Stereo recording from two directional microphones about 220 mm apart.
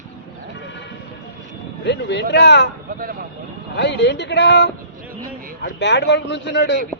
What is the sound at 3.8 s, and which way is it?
A man's voice, 50° left (ahead or behind).